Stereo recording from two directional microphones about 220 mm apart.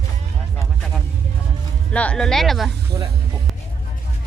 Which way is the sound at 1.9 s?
5° left (ahead or behind).